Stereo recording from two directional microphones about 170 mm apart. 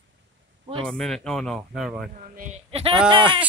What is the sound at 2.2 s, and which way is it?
Speech, 50° right (ahead or behind).